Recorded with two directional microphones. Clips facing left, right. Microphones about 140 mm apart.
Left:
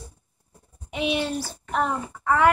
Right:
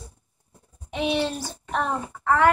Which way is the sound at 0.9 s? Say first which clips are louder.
Right 1 dB; 10° left (ahead or behind).